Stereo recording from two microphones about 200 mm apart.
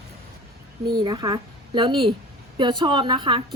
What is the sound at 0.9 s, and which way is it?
A woman's voice, 20° right (ahead or behind).